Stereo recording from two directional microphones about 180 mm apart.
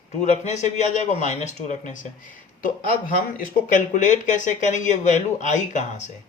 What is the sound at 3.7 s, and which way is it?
Speech, 45° left (ahead or behind).